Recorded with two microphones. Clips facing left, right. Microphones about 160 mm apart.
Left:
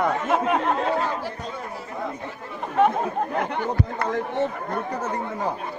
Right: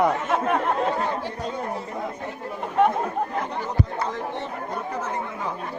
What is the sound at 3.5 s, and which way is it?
Speech, 60° left (ahead or behind).